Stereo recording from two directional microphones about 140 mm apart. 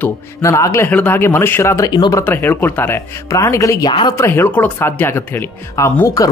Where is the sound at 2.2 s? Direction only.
15° left (ahead or behind); by 4.1 s 30° left (ahead or behind).